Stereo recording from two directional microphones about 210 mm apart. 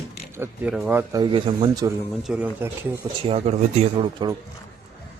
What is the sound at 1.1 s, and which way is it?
Speech, 20° right (ahead or behind).